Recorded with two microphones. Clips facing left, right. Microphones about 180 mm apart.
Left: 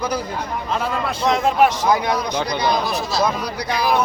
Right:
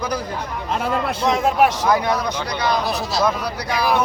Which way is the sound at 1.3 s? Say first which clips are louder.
Left 1 dB; 5° right (ahead or behind).